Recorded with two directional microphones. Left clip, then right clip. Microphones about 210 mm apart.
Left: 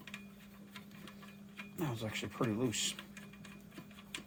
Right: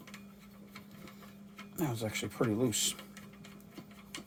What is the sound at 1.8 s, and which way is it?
Speech, 35° right (ahead or behind).